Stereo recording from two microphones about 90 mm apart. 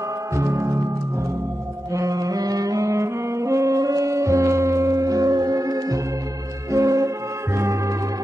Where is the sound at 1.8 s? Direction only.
40° right (ahead or behind).